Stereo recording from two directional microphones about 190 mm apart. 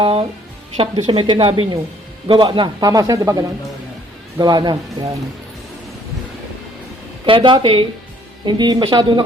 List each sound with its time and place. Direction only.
0.0 s a man's voice: 30° right (ahead or behind)
7.3 s a man's voice: 25° right (ahead or behind)